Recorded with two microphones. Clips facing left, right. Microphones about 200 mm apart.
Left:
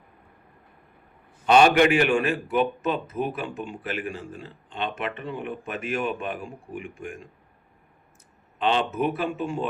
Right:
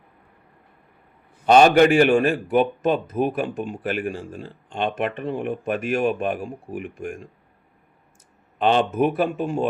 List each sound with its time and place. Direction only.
1.5 s a man's voice: 40° right (ahead or behind)
8.5 s a man's voice: 50° right (ahead or behind)